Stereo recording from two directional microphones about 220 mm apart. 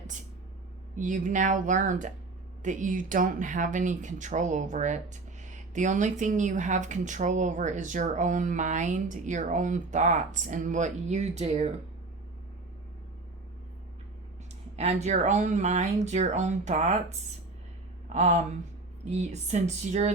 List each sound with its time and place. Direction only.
0.9 s speech: 35° right (ahead or behind)
15.0 s speech: 30° right (ahead or behind)